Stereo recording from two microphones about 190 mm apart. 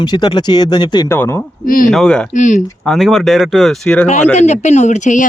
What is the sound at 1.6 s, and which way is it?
Speech, 45° left (ahead or behind).